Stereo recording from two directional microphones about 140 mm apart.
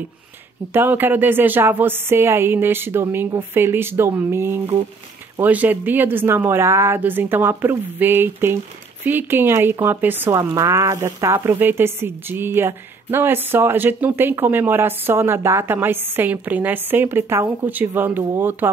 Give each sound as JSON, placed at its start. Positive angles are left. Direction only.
{"t": 0.7, "sound": "speech", "side_deg": -15}